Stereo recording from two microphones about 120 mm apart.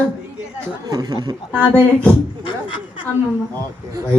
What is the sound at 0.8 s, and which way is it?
Speech, 30° right (ahead or behind).